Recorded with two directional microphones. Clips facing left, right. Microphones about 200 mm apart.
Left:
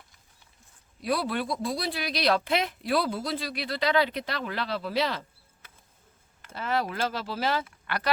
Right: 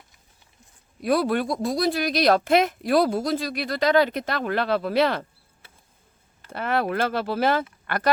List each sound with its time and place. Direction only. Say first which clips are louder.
1.0 s speech: right 6 dB; 50° right (ahead or behind)
6.5 s speech: right 5 dB; 60° right (ahead or behind)